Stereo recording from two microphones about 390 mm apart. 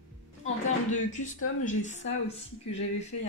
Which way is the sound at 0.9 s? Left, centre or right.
Centre.